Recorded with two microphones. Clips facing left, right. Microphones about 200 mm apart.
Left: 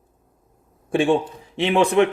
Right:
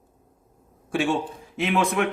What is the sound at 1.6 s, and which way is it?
Speech, 30° left (ahead or behind).